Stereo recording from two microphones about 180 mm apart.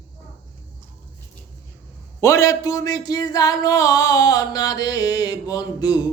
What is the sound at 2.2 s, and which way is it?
A man's voice, 20° left (ahead or behind).